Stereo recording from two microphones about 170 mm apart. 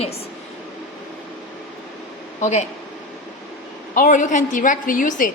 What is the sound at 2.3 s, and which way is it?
Speech, 45° left (ahead or behind).